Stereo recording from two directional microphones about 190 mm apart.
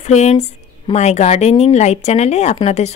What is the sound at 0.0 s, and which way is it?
Speech, 35° left (ahead or behind).